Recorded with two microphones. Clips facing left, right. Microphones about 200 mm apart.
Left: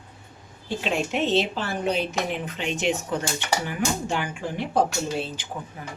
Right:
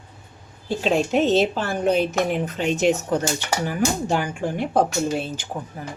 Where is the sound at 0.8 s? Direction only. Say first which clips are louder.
Right 6 dB; 35° right (ahead or behind).